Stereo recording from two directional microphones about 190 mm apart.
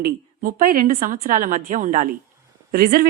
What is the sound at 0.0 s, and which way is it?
Speech, 50° right (ahead or behind).